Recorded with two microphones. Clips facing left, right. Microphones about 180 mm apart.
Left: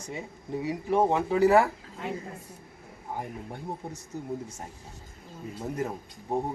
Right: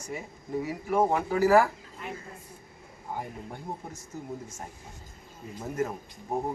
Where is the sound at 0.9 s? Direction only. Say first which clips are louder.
Left 1 dB; 25° left (ahead or behind).